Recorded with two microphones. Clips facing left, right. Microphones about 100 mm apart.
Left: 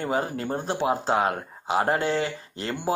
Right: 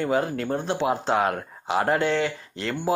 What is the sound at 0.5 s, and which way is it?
Speech, 40° left (ahead or behind).